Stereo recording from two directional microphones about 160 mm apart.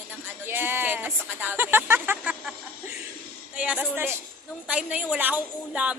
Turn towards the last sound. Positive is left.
turn(degrees=-10)  # may be behind; listen again after turning